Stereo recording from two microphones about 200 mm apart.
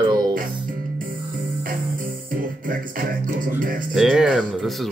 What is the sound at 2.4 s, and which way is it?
Music, 45° right (ahead or behind).